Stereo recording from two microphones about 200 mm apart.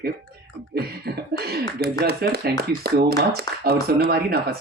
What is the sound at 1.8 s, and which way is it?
Speech, 50° right (ahead or behind).